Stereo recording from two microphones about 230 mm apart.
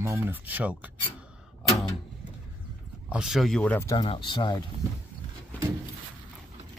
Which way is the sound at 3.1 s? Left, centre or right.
Centre.